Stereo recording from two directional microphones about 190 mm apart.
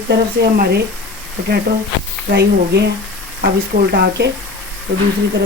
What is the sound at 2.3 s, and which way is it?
Speech, 60° right (ahead or behind).